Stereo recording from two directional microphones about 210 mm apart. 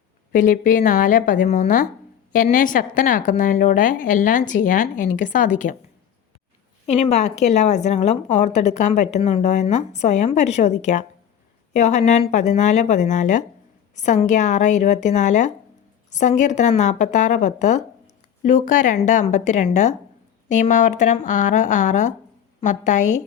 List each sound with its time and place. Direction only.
0.3 s a woman's voice: 40° left (ahead or behind)
6.8 s a woman's voice: 30° left (ahead or behind)